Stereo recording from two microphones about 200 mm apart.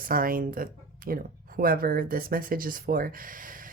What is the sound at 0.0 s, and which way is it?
Speech, 45° right (ahead or behind).